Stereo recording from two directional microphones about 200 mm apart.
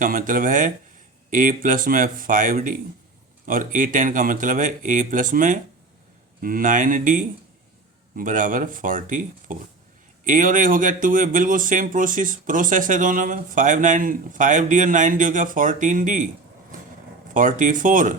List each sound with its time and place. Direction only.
0.0 s speech: 40° right (ahead or behind)
17.3 s speech: 40° right (ahead or behind)